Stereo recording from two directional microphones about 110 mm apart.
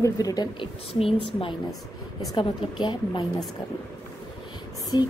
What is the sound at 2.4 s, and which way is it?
Speech, 45° left (ahead or behind).